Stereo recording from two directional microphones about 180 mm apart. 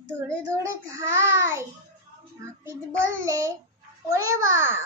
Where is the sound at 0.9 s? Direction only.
15° right (ahead or behind).